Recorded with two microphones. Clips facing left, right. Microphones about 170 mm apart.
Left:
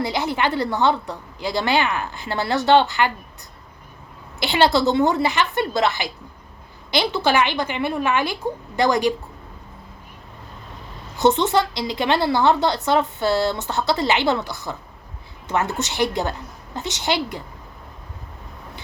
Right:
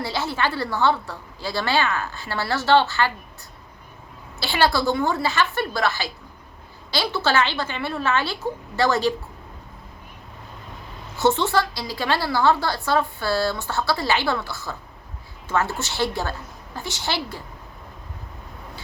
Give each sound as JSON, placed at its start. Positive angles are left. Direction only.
{"t": 0.0, "sound": "a woman's voice", "side_deg": 20}
{"t": 4.4, "sound": "a woman's voice", "side_deg": 20}
{"t": 11.2, "sound": "a woman's voice", "side_deg": 20}